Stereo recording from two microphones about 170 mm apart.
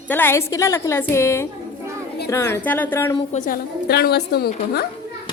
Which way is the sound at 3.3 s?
50° left (ahead or behind).